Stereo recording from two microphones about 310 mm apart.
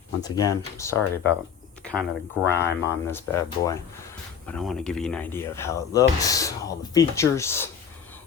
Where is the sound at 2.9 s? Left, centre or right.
Centre.